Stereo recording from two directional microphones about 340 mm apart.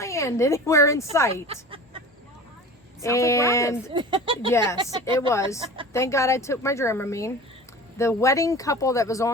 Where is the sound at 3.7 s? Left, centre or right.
Centre.